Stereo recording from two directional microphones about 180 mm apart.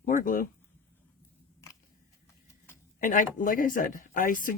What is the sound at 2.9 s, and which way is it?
Speech, 50° left (ahead or behind).